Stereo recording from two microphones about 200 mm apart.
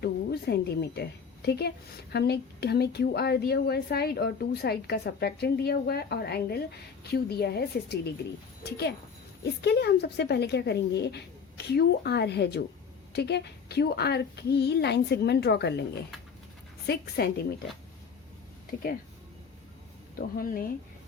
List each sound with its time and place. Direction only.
0.0 s a woman's voice: 55° left (ahead or behind)
16.8 s speech: 55° left (ahead or behind)
20.1 s a woman's voice: 45° left (ahead or behind)